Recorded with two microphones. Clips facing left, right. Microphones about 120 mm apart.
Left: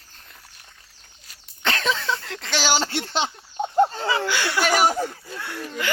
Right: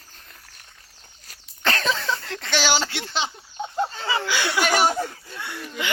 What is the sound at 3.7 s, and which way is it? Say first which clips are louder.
Chicken: left 8 dB; 45° left (ahead or behind).